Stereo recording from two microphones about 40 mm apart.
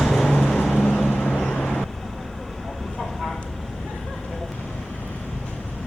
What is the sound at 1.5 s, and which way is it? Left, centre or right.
Vehicle, left.